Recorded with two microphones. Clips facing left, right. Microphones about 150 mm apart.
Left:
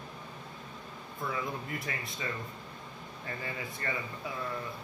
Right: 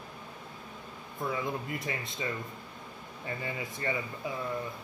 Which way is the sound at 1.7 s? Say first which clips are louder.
Right 2 dB; 20° right (ahead or behind).